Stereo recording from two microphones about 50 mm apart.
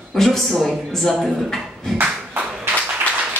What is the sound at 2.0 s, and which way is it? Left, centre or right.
Clapping, right.